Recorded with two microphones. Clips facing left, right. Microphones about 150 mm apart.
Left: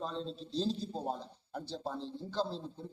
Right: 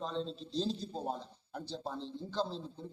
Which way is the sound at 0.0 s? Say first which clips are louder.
Right 1 dB; 5° left (ahead or behind).